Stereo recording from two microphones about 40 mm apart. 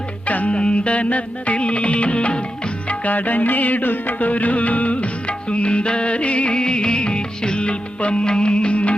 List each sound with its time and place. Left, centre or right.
0.3 s music: left
0.5 s music: left
2.9 s music: left